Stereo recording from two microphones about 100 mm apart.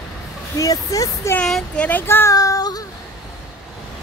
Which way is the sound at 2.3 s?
35° left (ahead or behind).